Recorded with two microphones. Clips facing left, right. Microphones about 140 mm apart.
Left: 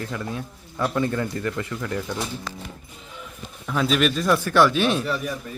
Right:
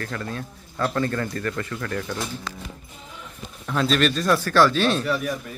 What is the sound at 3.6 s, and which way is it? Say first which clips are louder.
Speech: even; 5° left (ahead or behind).